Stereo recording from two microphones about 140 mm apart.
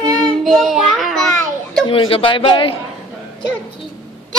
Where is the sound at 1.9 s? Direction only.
40° left (ahead or behind).